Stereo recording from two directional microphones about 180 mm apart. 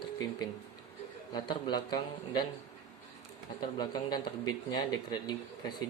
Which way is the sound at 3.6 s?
20° left (ahead or behind).